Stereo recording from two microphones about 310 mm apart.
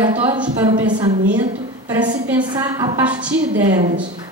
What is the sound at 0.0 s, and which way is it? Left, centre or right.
A woman's voice, centre.